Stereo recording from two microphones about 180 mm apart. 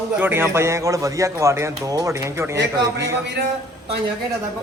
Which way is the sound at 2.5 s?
75° right (ahead or behind).